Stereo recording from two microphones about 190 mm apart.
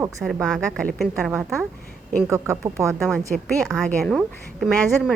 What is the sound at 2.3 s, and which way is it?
Speech, 15° right (ahead or behind).